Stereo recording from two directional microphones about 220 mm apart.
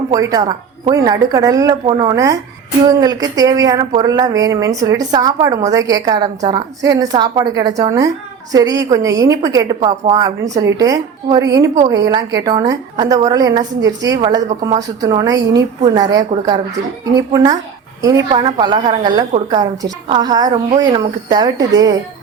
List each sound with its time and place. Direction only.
0.1 s a woman's voice: 15° right (ahead or behind)